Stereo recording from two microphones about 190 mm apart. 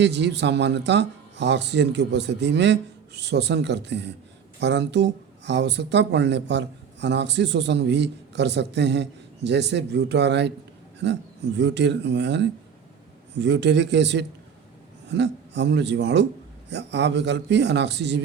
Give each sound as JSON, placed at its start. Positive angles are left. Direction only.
{"t": 0.0, "sound": "speech", "side_deg": -65}